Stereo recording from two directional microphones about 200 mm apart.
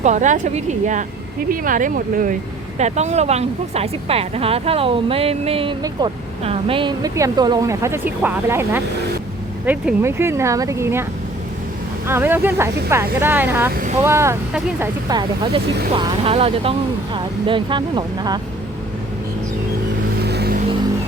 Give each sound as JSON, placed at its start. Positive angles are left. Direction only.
{"t": 0.0, "sound": "speech", "side_deg": -35}
{"t": 12.0, "sound": "speech", "side_deg": -10}
{"t": 15.5, "sound": "speech", "side_deg": -25}
{"t": 20.2, "sound": "vehicle", "side_deg": -55}